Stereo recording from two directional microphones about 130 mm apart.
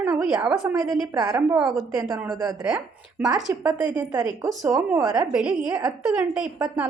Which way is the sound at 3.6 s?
30° right (ahead or behind).